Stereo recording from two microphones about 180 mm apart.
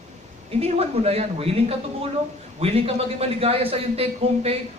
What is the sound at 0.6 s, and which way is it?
Speech, 35° right (ahead or behind).